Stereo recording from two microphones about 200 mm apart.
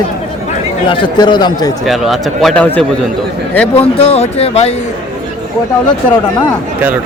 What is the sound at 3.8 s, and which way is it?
Speech, 30° left (ahead or behind).